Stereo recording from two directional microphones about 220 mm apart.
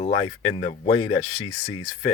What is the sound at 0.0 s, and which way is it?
Speech, 30° left (ahead or behind).